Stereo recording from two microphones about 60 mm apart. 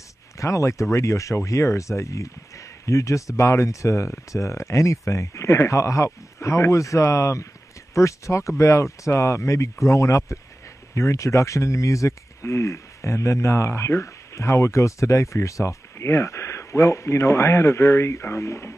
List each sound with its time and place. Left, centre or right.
0.4 s speech: left